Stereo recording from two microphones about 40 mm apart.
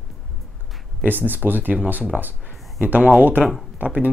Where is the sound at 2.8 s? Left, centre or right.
Right.